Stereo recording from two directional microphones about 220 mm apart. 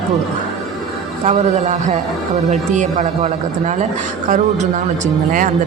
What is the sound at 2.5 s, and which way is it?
Speech, 35° right (ahead or behind).